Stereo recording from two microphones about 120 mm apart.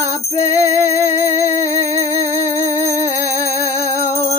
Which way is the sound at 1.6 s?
25° left (ahead or behind).